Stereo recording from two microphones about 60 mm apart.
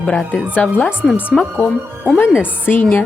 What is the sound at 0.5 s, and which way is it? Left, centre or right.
Speech, left.